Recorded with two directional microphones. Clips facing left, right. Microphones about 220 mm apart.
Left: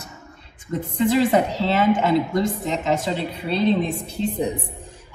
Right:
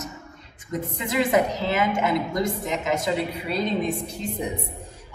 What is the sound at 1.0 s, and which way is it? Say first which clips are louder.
A woman's voice: left 4 dB; 30° left (ahead or behind).